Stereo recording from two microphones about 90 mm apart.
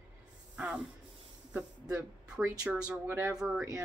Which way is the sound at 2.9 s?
30° right (ahead or behind).